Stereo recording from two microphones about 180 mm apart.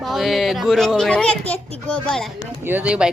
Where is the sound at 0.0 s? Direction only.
Centre (ahead or behind).